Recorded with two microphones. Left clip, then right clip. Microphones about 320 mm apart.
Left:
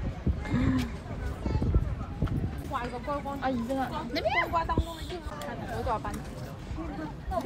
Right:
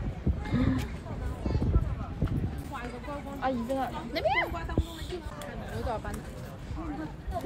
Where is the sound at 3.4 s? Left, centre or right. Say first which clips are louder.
Right 5 dB; right.